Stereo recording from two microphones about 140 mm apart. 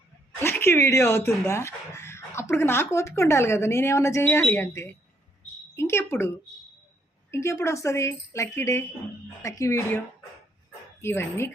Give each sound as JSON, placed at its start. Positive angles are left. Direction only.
{"t": 0.3, "sound": "a woman's voice", "side_deg": 15}
{"t": 11.0, "sound": "a woman's voice", "side_deg": 15}